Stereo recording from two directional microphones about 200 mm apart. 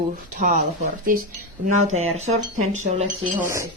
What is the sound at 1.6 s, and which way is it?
Speech, 35° right (ahead or behind).